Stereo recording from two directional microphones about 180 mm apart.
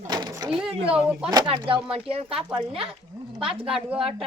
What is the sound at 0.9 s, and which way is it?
Speech, 5° right (ahead or behind).